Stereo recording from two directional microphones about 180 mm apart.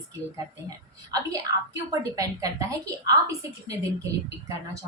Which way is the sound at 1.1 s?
20° right (ahead or behind).